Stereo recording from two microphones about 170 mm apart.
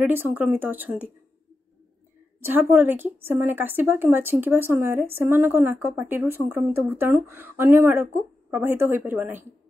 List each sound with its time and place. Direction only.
0.0 s a woman's voice: 10° right (ahead or behind)
2.4 s a woman's voice: 10° right (ahead or behind)